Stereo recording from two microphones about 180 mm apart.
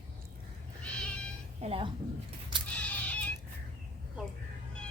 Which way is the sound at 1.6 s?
30° right (ahead or behind).